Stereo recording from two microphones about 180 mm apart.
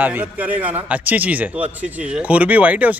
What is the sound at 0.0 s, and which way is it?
A man's voice, 10° right (ahead or behind).